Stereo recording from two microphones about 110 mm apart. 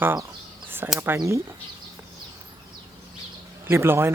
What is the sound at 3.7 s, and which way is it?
Speech, 20° right (ahead or behind).